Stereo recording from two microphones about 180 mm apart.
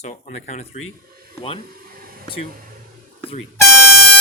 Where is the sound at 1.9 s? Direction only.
55° right (ahead or behind).